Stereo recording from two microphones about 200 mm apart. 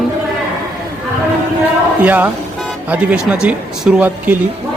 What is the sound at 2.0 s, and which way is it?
A woman's voice, 10° right (ahead or behind).